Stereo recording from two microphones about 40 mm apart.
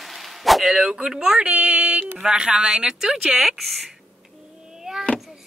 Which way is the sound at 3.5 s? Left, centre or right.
Centre.